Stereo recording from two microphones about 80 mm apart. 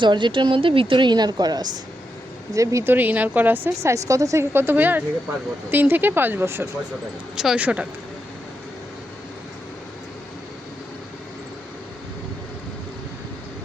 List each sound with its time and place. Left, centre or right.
0.0 s a woman's voice: right
2.5 s speech: right
2.8 s speech: right
3.8 s a woman's voice: right
7.3 s speech: centre